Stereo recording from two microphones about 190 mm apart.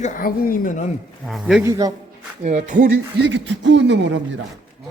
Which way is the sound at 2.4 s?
40° right (ahead or behind).